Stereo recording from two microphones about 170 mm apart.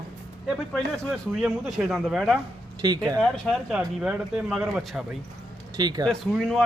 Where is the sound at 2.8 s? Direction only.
25° right (ahead or behind).